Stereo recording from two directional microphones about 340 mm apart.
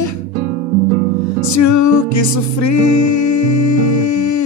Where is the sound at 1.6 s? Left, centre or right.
Left.